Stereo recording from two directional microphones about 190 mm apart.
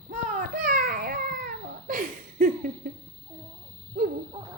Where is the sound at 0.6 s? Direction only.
45° right (ahead or behind).